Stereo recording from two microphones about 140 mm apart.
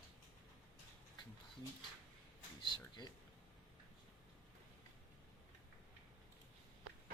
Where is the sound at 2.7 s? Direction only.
30° left (ahead or behind).